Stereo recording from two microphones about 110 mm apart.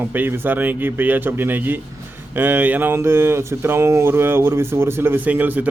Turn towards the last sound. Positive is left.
turn(degrees=-15)  # may be behind; listen again after turning